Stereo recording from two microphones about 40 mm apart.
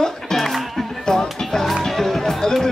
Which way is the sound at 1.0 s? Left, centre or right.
Centre.